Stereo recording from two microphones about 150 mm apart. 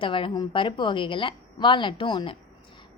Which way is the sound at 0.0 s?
35° left (ahead or behind).